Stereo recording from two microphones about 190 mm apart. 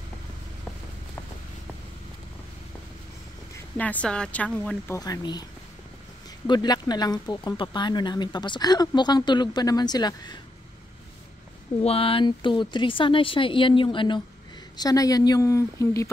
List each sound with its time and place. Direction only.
3.7 s speech: 5° left (ahead or behind)
11.8 s speech: 30° left (ahead or behind)